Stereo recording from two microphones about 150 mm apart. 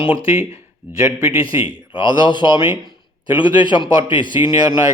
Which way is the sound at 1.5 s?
35° left (ahead or behind).